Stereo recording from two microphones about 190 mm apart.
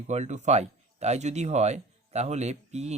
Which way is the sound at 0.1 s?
35° right (ahead or behind).